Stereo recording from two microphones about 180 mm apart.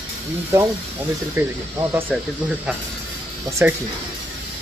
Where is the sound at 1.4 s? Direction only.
15° right (ahead or behind).